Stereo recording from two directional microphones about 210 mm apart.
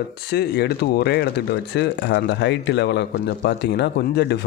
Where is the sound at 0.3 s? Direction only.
50° left (ahead or behind).